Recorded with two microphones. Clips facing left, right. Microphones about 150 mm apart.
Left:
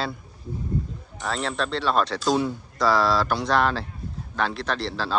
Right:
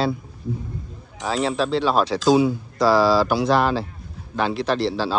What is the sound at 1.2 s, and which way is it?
Speech, 5° right (ahead or behind).